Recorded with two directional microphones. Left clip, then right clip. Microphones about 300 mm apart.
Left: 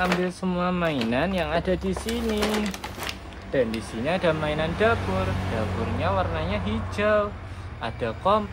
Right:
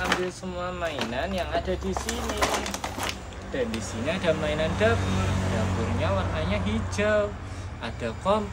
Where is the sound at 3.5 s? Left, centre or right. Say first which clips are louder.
Left 5 dB; centre.